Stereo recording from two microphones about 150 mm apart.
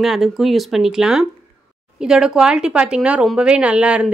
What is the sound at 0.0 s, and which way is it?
Speech, centre (ahead or behind).